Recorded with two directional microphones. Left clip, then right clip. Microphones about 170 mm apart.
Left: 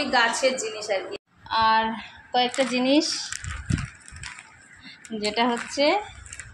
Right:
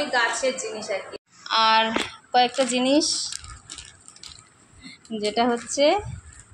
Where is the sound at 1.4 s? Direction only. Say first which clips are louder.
Right 2 dB; 5° right (ahead or behind).